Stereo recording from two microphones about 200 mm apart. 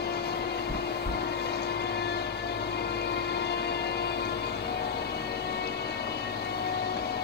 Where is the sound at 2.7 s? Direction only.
55° left (ahead or behind).